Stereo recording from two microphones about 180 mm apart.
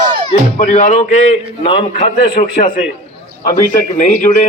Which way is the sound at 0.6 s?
40° left (ahead or behind).